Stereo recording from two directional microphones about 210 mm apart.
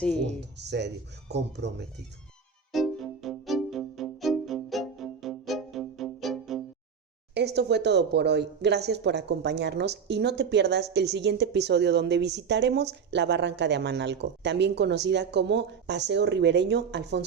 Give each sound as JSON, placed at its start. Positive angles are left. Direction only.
{"t": 0.0, "sound": "speech", "side_deg": 5}
{"t": 0.5, "sound": "speech", "side_deg": -55}
{"t": 2.7, "sound": "music", "side_deg": 0}
{"t": 7.3, "sound": "speech", "side_deg": -55}